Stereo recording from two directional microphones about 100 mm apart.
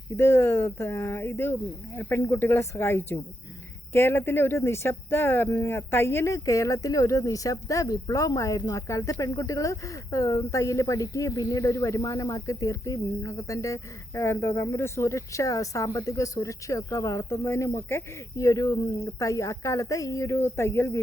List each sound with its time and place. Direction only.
0.2 s speech: 25° left (ahead or behind)